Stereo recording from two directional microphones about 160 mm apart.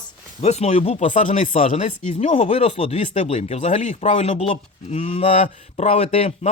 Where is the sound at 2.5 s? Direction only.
35° left (ahead or behind).